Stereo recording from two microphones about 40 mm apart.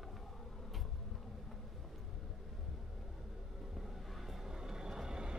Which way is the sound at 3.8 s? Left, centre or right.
Centre.